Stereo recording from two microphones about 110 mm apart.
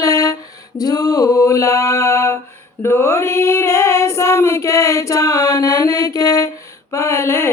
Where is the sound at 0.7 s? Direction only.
35° left (ahead or behind).